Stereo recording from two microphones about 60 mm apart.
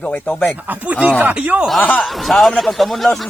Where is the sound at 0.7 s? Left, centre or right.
Right.